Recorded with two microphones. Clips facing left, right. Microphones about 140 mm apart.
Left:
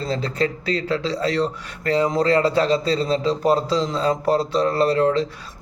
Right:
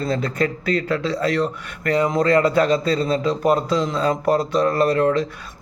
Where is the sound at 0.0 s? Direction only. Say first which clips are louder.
Right 1 dB; 30° left (ahead or behind).